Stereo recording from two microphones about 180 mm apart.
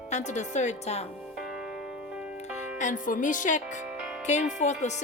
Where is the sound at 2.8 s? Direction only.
45° left (ahead or behind).